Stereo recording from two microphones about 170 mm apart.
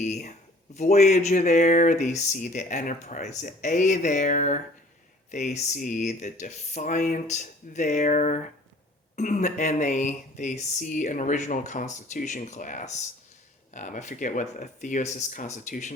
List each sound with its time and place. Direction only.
0.0 s speech: 45° left (ahead or behind)